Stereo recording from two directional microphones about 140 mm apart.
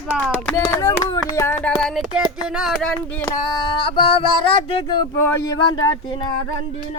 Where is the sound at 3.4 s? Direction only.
35° left (ahead or behind).